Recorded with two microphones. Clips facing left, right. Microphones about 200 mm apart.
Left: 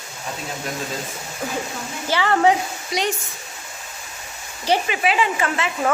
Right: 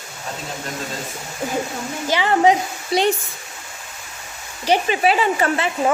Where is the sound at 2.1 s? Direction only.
15° right (ahead or behind).